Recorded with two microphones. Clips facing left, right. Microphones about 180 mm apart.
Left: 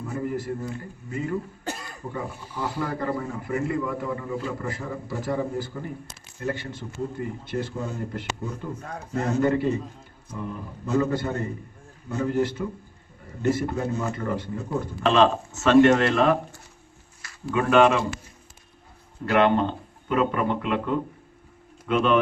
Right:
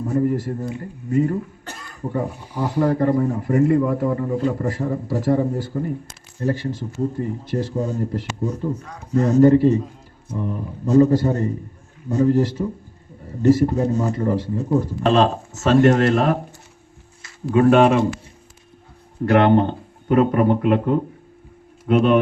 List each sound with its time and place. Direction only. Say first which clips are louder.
0.0 s a man's voice: right 9 dB; 35° right (ahead or behind)
1.1 s speech: right 9 dB; 45° right (ahead or behind)
2.6 s a man's voice: right 9 dB; 40° right (ahead or behind)
17.5 s a man's voice: right 5 dB; 35° right (ahead or behind)
19.2 s a man's voice: right 5 dB; 45° right (ahead or behind)